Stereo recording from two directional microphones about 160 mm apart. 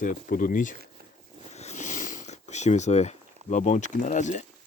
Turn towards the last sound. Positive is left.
turn(degrees=50)  # may be behind; listen again after turning